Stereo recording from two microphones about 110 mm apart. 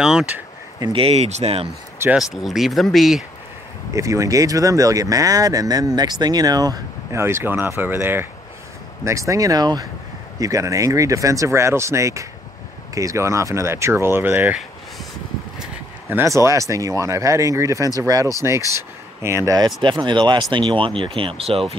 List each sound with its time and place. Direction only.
0.0 s speech: 5° right (ahead or behind)
0.9 s speech: 65° right (ahead or behind)
2.1 s speech: 5° right (ahead or behind)
3.9 s speech: 30° right (ahead or behind)
7.2 s speech: 25° right (ahead or behind)
16.1 s speech: 25° right (ahead or behind)
19.8 s speech: 45° right (ahead or behind); by 21.7 s 65° right (ahead or behind)